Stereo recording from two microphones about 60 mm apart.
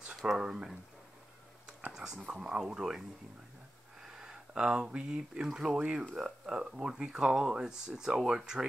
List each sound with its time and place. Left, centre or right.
0.0 s speech: centre
1.9 s speech: centre
4.1 s speech: centre